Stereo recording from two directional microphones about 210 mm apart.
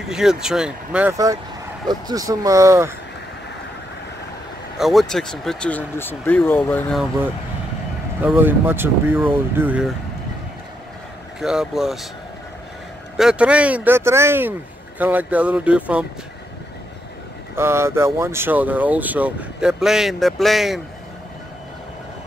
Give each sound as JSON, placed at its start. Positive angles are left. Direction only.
{"t": 0.1, "sound": "speech", "side_deg": -5}
{"t": 1.1, "sound": "speech", "side_deg": -15}
{"t": 4.7, "sound": "speech", "side_deg": 0}
{"t": 8.2, "sound": "speech", "side_deg": -10}
{"t": 11.3, "sound": "speech", "side_deg": 0}
{"t": 13.2, "sound": "speech", "side_deg": -5}
{"t": 17.6, "sound": "speech", "side_deg": -10}